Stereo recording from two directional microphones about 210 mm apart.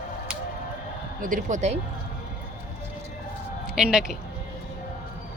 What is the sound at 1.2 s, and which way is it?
Speech, 40° right (ahead or behind).